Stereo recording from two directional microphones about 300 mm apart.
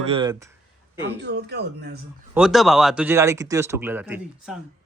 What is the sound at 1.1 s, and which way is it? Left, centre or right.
Speech, right.